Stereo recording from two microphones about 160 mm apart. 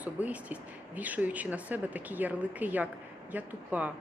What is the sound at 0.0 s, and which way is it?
Speech, 10° right (ahead or behind).